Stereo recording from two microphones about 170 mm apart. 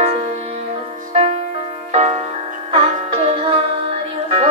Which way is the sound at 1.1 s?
40° right (ahead or behind).